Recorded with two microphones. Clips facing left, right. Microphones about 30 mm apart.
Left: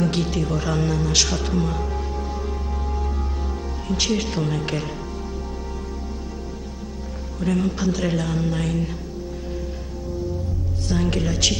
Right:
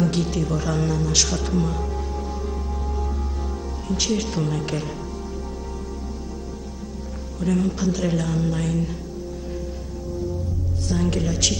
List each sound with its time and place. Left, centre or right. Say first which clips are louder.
0.0 s a man's voice: even; centre
3.9 s a woman's voice: left 1 dB; centre
7.3 s a woman's voice: even; centre
10.9 s speech: left 1 dB; centre